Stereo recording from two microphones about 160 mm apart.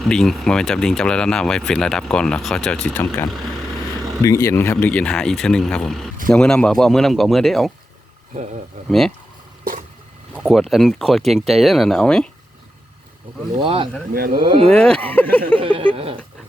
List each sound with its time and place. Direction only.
0.0 s speech: 5° left (ahead or behind)
8.9 s speech: centre (ahead or behind)
10.3 s speech: centre (ahead or behind)
13.6 s speech: 30° right (ahead or behind)
14.6 s speech: 5° left (ahead or behind)
15.5 s speech: 30° right (ahead or behind)